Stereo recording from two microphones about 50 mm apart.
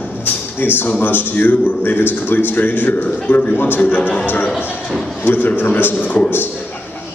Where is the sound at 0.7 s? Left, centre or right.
Left.